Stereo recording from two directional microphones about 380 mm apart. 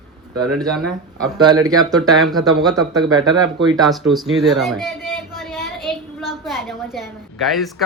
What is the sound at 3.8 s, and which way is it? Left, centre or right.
A woman's voice, centre.